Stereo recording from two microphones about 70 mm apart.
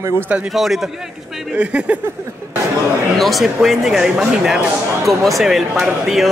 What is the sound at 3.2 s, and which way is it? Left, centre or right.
Speech, centre.